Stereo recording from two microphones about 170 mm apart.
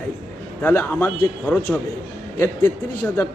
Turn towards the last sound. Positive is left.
turn(degrees=10)  # may be behind; listen again after turning